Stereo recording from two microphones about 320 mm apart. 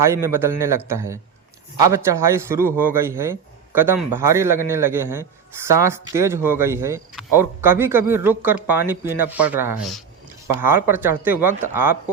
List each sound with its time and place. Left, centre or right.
0.0 s speech: centre